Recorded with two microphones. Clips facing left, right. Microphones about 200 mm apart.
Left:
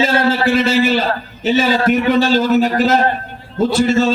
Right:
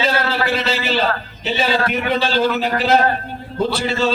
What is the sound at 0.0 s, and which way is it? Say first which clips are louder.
A man's voice: left 5 dB; 50° left (ahead or behind).